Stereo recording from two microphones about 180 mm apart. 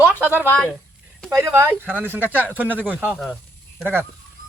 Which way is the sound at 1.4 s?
15° right (ahead or behind).